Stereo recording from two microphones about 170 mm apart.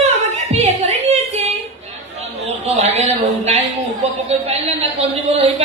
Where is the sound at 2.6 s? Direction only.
40° right (ahead or behind).